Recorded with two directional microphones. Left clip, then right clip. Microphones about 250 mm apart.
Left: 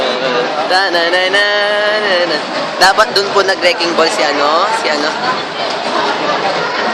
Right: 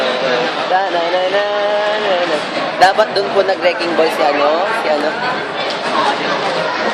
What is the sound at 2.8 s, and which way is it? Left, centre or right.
Speech, centre.